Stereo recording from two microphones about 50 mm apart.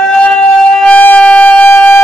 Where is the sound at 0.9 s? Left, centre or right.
Left.